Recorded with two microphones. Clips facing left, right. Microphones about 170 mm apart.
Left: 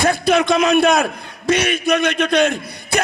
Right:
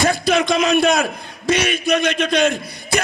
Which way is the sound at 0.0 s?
55° left (ahead or behind).